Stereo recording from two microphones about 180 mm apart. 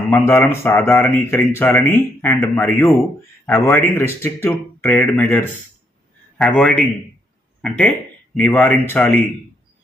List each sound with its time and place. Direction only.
0.1 s a man's voice: 10° left (ahead or behind)